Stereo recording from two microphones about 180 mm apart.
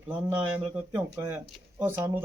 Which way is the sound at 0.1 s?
10° right (ahead or behind).